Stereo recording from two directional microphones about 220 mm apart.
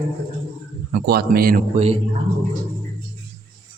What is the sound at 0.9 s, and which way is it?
Speech, 45° right (ahead or behind).